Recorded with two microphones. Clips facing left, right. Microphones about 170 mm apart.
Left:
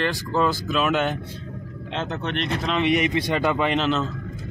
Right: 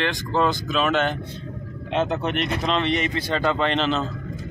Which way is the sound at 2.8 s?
15° left (ahead or behind).